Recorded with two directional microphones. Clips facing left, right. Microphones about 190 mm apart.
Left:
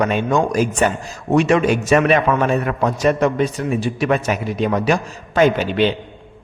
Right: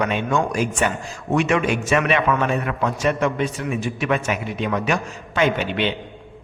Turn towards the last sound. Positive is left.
turn(degrees=40)  # may be behind; listen again after turning